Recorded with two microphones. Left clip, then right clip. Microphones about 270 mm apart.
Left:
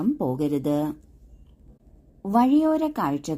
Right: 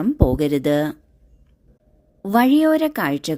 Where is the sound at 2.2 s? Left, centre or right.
Right.